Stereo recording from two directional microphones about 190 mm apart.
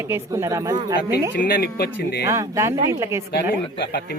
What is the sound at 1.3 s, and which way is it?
Speech, 50° left (ahead or behind).